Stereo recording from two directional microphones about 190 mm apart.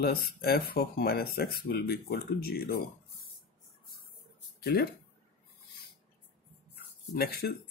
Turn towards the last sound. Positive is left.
turn(degrees=55)  # may be behind; listen again after turning